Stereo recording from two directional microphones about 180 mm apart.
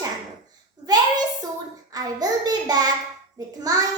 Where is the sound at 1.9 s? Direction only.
20° right (ahead or behind).